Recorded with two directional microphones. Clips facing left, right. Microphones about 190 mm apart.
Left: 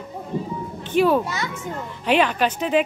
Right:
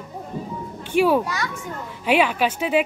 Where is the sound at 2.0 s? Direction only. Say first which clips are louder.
Even; 10° right (ahead or behind).